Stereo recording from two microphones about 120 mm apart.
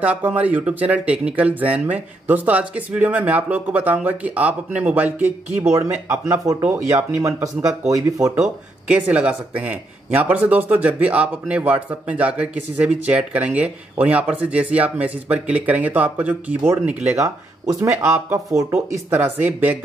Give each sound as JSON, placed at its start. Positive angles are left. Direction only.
{"t": 0.0, "sound": "speech", "side_deg": -15}
{"t": 7.9, "sound": "speech", "side_deg": -25}
{"t": 8.8, "sound": "speech", "side_deg": -10}
{"t": 19.0, "sound": "speech", "side_deg": -15}